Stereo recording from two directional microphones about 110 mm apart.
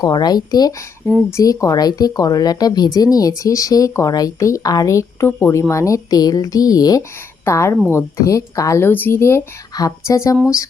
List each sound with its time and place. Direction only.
0.0 s a woman's voice: 40° left (ahead or behind)
8.9 s a woman's voice: 20° left (ahead or behind)